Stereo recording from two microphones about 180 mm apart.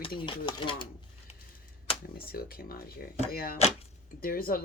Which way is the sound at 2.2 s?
55° left (ahead or behind).